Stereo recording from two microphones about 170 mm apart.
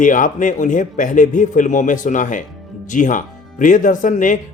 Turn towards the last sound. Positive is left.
turn(degrees=50)  # may be behind; listen again after turning